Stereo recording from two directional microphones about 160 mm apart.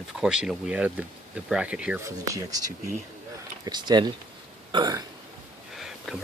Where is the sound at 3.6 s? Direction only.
25° right (ahead or behind).